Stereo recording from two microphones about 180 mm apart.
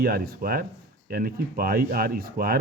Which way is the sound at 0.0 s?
55° right (ahead or behind).